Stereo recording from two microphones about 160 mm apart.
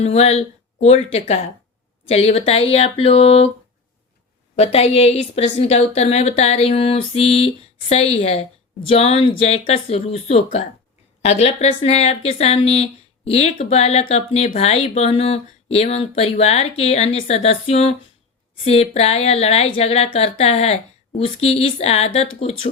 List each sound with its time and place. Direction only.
0.0 s speech: 40° left (ahead or behind)
4.5 s speech: 40° left (ahead or behind)